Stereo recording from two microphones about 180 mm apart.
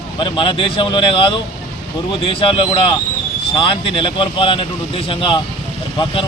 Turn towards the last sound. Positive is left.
turn(degrees=30)  # may be behind; listen again after turning